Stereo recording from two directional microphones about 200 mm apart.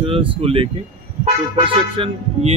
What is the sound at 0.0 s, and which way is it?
Speech, 25° right (ahead or behind).